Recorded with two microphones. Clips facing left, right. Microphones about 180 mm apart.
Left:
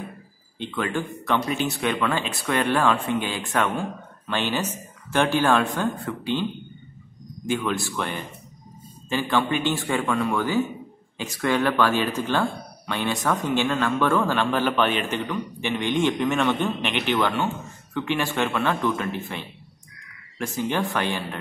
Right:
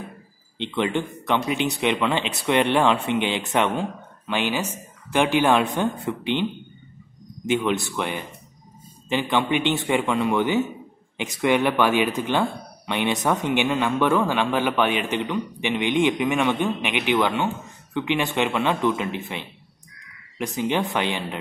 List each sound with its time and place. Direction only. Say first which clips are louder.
0.6 s speech: right 3 dB; 25° right (ahead or behind)
7.4 s speech: right 3 dB; 20° right (ahead or behind)